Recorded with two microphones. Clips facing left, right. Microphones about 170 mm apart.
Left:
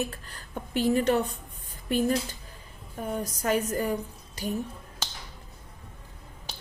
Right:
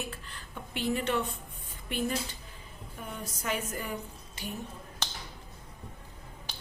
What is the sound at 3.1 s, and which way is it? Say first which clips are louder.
A woman's voice: left 8 dB; 40° left (ahead or behind).